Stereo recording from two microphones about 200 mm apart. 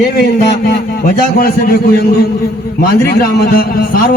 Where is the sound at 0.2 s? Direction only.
50° left (ahead or behind).